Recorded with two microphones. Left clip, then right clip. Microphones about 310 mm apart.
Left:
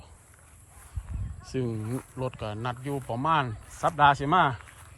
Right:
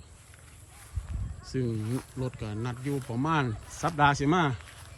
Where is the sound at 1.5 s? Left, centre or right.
Centre.